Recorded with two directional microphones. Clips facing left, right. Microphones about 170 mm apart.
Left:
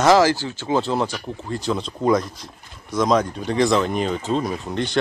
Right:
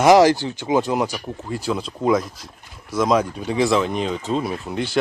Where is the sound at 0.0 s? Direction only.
20° right (ahead or behind).